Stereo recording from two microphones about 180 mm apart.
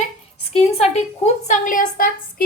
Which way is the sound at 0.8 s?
35° left (ahead or behind).